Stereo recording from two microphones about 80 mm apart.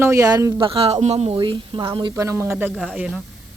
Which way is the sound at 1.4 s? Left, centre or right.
Right.